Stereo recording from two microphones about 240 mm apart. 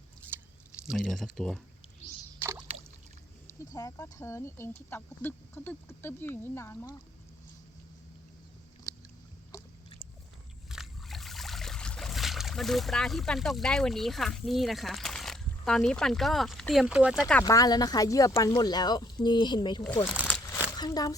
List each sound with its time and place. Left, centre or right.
0.9 s speech: centre
3.6 s speech: centre
9.5 s a sound: centre
10.7 s trickle: centre
17.4 s speech: centre
20.2 s a sound: centre